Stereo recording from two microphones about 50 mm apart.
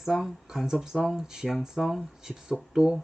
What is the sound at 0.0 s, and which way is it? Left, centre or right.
Speech, centre.